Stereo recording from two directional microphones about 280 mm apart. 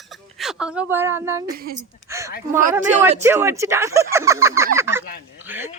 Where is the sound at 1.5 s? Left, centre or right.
Right.